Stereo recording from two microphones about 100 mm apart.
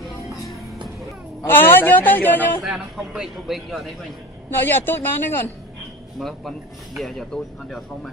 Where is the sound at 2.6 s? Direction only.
5° right (ahead or behind).